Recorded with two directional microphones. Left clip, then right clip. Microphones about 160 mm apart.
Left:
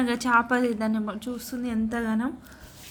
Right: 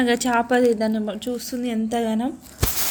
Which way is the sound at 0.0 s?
5° left (ahead or behind).